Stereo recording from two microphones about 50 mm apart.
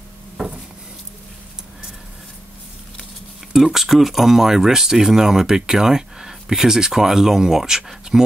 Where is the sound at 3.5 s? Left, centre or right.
Centre.